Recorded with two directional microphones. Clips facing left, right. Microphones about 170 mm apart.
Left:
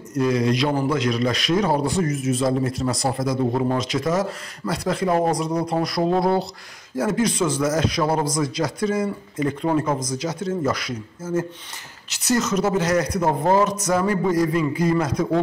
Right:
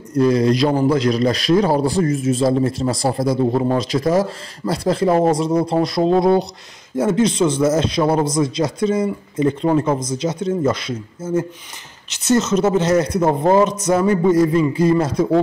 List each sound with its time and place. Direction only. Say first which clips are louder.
0.1 s a man's voice: right 5 dB; 35° right (ahead or behind)